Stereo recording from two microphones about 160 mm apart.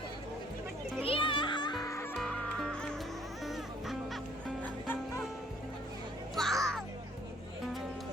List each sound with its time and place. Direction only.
1.0 s music: 35° left (ahead or behind)
2.1 s music: 5° left (ahead or behind)
6.3 s music: centre (ahead or behind)